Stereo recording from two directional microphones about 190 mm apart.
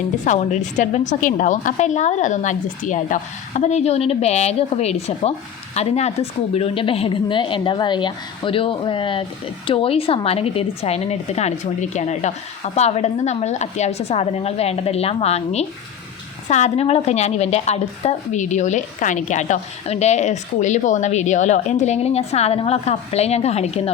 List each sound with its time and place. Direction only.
0.3 s a woman's voice: 40° left (ahead or behind)